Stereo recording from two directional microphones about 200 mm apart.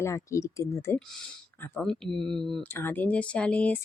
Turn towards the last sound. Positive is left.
turn(degrees=5)  # may be behind; listen again after turning